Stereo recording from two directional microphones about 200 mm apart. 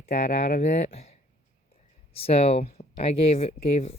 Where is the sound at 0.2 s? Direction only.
35° left (ahead or behind).